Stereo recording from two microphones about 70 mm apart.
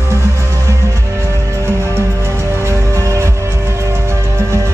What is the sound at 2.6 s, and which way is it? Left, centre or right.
Music, right.